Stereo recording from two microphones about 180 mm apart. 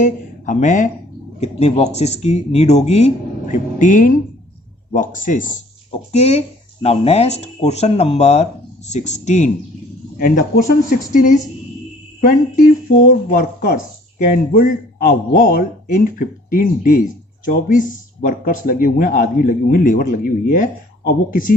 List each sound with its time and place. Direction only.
0.0 s speech: 45° left (ahead or behind)
14.3 s speech: 50° left (ahead or behind)